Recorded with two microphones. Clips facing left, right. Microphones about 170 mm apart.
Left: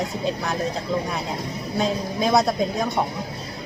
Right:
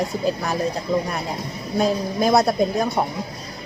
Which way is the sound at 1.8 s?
5° right (ahead or behind).